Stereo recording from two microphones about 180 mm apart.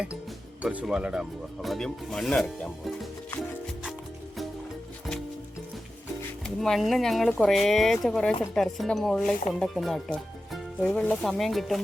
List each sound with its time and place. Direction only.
0.6 s speech: 5° right (ahead or behind)
6.4 s speech: centre (ahead or behind)